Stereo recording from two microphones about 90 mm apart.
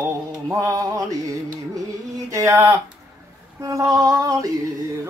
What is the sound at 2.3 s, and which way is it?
Female singing, 30° right (ahead or behind).